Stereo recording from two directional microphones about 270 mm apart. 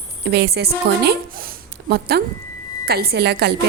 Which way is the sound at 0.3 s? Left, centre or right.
Right.